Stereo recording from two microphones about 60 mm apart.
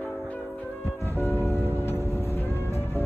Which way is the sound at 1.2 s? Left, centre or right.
Left.